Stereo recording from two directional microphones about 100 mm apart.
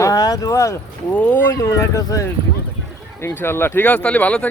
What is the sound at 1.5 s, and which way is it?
Speech, 35° left (ahead or behind).